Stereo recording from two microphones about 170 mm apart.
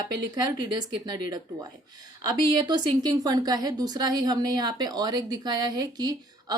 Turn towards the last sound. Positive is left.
turn(degrees=-25)  # may be behind; listen again after turning